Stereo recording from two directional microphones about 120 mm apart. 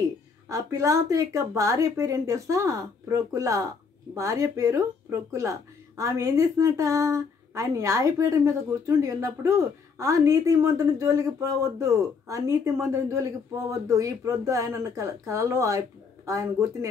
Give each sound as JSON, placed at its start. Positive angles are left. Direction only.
{"t": 0.5, "sound": "speech", "side_deg": -25}